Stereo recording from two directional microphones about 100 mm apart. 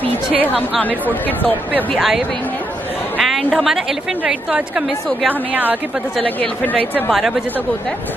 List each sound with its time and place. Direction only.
0.3 s a woman's voice: 10° right (ahead or behind)
0.8 s a woman's voice: 15° left (ahead or behind)
2.0 s speech: centre (ahead or behind)
3.2 s a sound: centre (ahead or behind)
3.5 s a woman's voice: 5° right (ahead or behind)
6.2 s a woman's voice: 15° left (ahead or behind)
7.1 s speech: centre (ahead or behind)